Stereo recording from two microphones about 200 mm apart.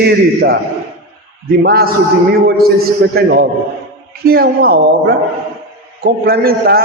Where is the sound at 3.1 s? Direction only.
50° right (ahead or behind).